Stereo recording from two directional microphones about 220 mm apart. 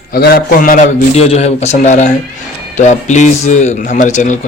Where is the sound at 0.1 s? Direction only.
45° left (ahead or behind).